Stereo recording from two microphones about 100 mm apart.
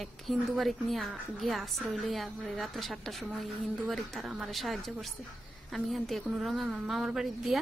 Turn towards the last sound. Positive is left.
turn(degrees=-5)  # may be behind; listen again after turning